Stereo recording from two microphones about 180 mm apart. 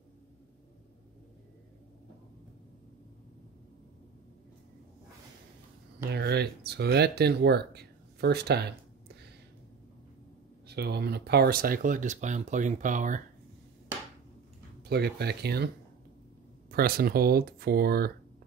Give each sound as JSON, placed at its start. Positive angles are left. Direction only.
{"t": 6.1, "sound": "speech", "side_deg": -65}
{"t": 10.7, "sound": "speech", "side_deg": -65}
{"t": 14.9, "sound": "speech", "side_deg": -65}
{"t": 16.7, "sound": "speech", "side_deg": -55}